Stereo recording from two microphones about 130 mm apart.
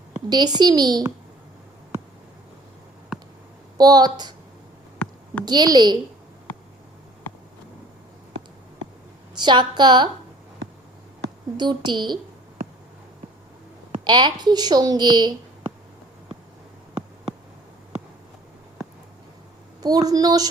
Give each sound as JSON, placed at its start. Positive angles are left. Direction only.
{"t": 0.3, "sound": "speech", "side_deg": -35}
{"t": 3.8, "sound": "speech", "side_deg": -30}
{"t": 4.9, "sound": "a sound", "side_deg": 10}
{"t": 5.5, "sound": "speech", "side_deg": -35}
{"t": 9.3, "sound": "speech", "side_deg": -35}
{"t": 11.5, "sound": "speech", "side_deg": -35}
{"t": 14.0, "sound": "speech", "side_deg": -35}
{"t": 19.8, "sound": "a woman's voice", "side_deg": -30}